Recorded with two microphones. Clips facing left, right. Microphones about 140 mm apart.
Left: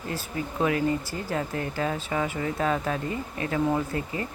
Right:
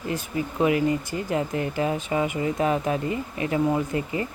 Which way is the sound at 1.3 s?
20° right (ahead or behind).